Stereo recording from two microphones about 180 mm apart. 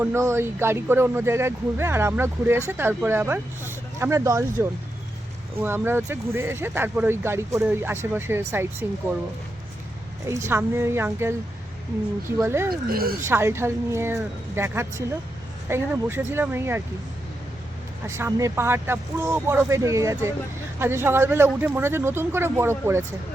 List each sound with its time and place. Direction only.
0.0 s speech: 15° right (ahead or behind)
5.5 s speech: 10° right (ahead or behind)
10.2 s speech: 15° right (ahead or behind)
12.4 s speech: 15° right (ahead or behind)
12.9 s speech: 55° right (ahead or behind)
13.2 s speech: 15° right (ahead or behind)
18.1 s speech: 15° right (ahead or behind)